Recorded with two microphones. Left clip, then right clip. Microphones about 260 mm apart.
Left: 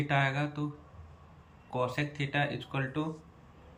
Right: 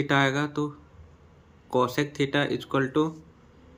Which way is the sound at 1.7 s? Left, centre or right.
Centre.